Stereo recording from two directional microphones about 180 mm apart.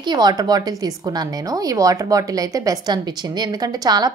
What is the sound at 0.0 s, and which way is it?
A woman's voice, 25° right (ahead or behind).